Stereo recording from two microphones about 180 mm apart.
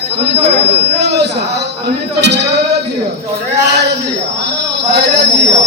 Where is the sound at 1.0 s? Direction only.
70° right (ahead or behind).